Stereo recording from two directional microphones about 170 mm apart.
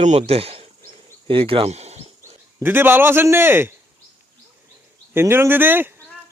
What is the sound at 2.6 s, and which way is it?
A man's voice, 10° right (ahead or behind).